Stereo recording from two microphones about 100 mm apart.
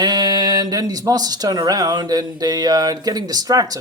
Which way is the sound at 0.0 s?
45° right (ahead or behind).